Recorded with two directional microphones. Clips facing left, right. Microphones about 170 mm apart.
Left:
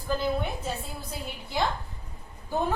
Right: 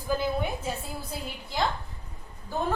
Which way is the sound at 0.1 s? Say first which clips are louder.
Right 1 dB; 10° right (ahead or behind).